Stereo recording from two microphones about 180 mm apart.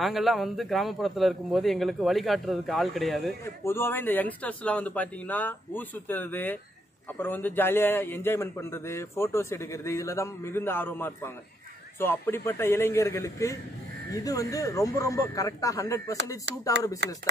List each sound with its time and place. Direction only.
0.0 s a man's voice: centre (ahead or behind)
3.6 s a man's voice: 15° left (ahead or behind)
17.0 s speech: 70° right (ahead or behind)